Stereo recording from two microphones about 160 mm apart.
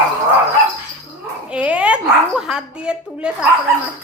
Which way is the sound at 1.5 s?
5° right (ahead or behind).